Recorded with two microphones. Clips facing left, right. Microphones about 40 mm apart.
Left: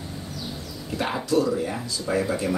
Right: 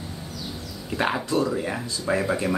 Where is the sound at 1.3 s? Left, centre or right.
Right.